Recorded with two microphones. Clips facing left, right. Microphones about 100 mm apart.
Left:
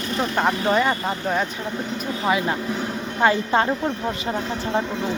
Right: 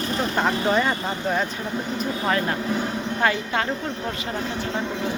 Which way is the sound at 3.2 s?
25° left (ahead or behind).